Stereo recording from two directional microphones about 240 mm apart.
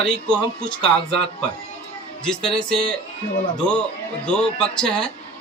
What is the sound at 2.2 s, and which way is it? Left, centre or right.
A man's voice, centre.